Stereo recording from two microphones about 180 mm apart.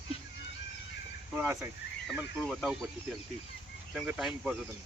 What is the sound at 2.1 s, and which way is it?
Speech, centre (ahead or behind).